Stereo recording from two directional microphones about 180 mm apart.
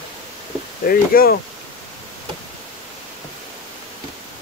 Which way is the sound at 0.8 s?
55° left (ahead or behind).